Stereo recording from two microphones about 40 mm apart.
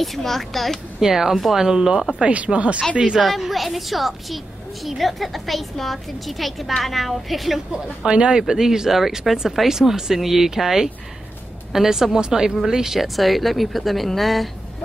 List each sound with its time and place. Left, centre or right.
0.0 s speech: centre
1.0 s speech: centre
2.2 s speech: right
3.2 s speech: centre
7.7 s speech: right; by 14.5 s centre